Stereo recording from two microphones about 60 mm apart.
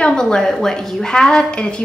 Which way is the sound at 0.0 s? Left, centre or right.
Centre.